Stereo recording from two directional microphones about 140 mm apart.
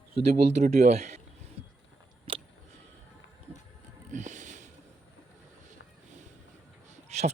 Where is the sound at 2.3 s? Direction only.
40° right (ahead or behind).